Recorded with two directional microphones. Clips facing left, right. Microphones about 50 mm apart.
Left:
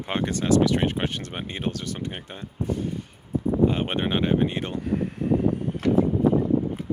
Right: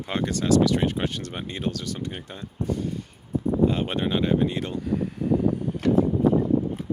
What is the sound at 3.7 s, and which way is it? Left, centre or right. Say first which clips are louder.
Speech: even; left.